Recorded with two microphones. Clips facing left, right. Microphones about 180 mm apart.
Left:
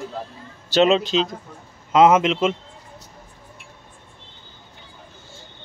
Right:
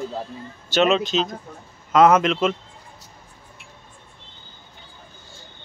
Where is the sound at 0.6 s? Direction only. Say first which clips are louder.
Left 2 dB; 35° left (ahead or behind).